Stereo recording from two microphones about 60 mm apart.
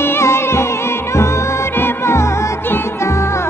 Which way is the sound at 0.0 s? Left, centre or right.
Left.